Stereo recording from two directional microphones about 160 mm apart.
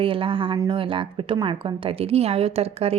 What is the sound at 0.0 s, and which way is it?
A woman's voice, 35° right (ahead or behind).